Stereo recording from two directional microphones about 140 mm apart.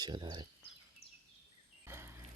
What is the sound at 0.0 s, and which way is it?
Speech, 30° right (ahead or behind).